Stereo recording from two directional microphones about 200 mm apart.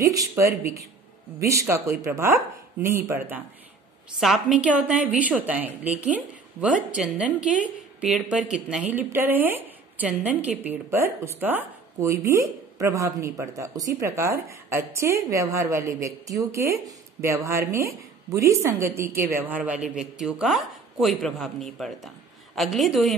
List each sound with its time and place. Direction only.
0.0 s a woman's voice: 15° right (ahead or behind); by 23.1 s centre (ahead or behind)